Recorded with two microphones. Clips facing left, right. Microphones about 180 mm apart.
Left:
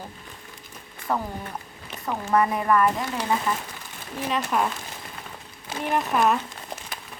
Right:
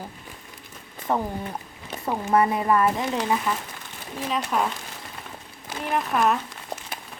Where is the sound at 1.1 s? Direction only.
20° right (ahead or behind).